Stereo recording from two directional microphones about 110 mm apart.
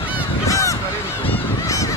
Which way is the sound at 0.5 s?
30° left (ahead or behind).